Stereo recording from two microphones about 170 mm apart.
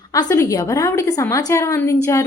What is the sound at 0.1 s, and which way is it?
A woman's voice, 20° left (ahead or behind).